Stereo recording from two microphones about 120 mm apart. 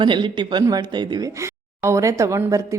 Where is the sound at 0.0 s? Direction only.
40° right (ahead or behind).